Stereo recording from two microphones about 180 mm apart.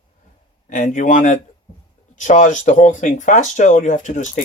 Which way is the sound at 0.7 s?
45° left (ahead or behind).